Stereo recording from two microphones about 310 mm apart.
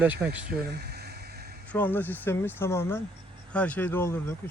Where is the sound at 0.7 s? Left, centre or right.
Right.